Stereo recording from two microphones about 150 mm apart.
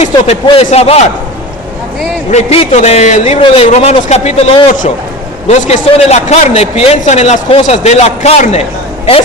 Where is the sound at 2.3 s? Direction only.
45° left (ahead or behind).